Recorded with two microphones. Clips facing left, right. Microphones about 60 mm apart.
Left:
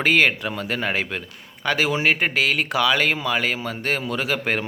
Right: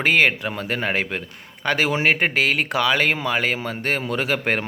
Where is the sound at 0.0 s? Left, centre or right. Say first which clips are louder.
Even; right.